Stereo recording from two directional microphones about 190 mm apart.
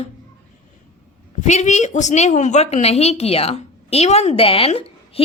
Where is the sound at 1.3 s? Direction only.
40° left (ahead or behind).